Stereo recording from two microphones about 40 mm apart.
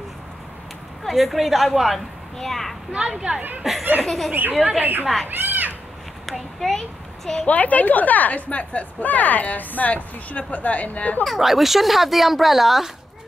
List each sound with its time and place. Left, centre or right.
1.0 s a child's voice: centre
3.0 s speech: centre
3.6 s speech: centre
4.3 s speech: right
6.2 s a child's voice: centre
7.3 s speech: left
11.2 s speech: centre